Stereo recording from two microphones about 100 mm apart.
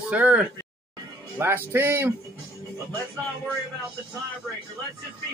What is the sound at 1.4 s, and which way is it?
Speech, 25° right (ahead or behind).